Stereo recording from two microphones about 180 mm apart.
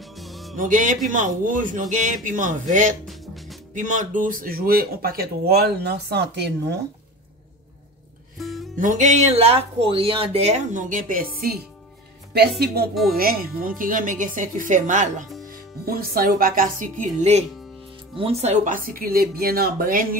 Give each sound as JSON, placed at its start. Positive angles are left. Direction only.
{"t": 0.0, "sound": "music", "side_deg": 0}
{"t": 0.6, "sound": "speech", "side_deg": -45}
{"t": 3.1, "sound": "music", "side_deg": 0}
{"t": 3.7, "sound": "speech", "side_deg": -45}
{"t": 8.4, "sound": "music", "side_deg": 0}
{"t": 8.7, "sound": "speech", "side_deg": -45}
{"t": 15.8, "sound": "speech", "side_deg": -55}
{"t": 17.0, "sound": "speech", "side_deg": -40}